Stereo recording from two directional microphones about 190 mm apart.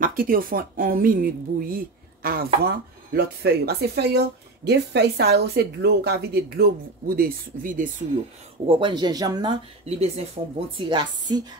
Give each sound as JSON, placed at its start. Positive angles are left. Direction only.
{"t": 0.0, "sound": "speech", "side_deg": -50}
{"t": 8.6, "sound": "speech", "side_deg": -25}